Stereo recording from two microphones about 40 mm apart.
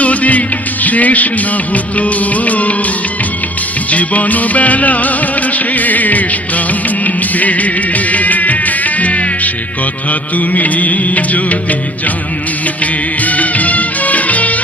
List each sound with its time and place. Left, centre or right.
0.0 s music: left
3.8 s music: left